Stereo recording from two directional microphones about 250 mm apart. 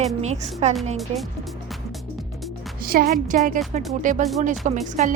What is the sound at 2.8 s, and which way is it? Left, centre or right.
A woman's voice, right.